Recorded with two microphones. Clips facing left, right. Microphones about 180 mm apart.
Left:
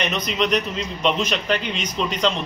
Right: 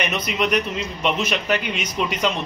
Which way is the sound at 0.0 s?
10° right (ahead or behind).